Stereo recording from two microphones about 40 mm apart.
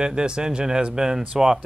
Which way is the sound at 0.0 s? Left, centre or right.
Right.